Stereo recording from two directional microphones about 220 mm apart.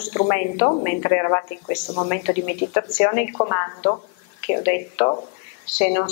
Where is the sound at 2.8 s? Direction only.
20° left (ahead or behind).